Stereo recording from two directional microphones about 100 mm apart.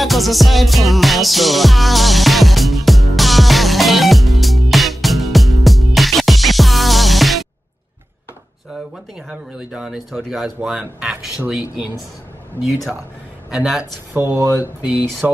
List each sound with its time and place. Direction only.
0.0 s music: centre (ahead or behind)
9.3 s speech: 10° right (ahead or behind)
13.5 s speech: 5° right (ahead or behind)
14.1 s speech: 20° right (ahead or behind)